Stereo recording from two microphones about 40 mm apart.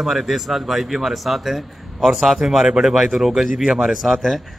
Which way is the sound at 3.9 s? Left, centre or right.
Centre.